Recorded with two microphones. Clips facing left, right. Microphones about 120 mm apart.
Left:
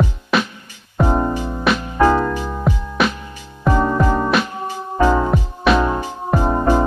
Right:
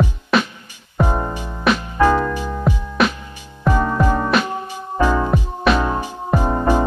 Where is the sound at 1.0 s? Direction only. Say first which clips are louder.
Left 3 dB; 15° left (ahead or behind).